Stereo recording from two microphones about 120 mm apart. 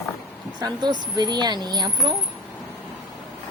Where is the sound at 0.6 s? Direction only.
35° right (ahead or behind).